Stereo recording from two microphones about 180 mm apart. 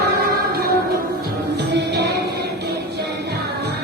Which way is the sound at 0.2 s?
60° right (ahead or behind).